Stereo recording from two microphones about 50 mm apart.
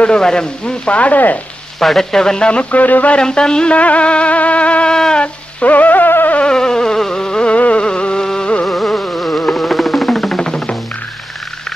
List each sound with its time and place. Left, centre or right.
0.0 s music: centre; by 1.4 s left
1.8 s speech: centre
2.7 s speech: left
3.2 s music: centre
4.9 s speech: centre
5.2 s a sound: left
6.5 s insect: centre
7.8 s music: centre
9.7 s music: centre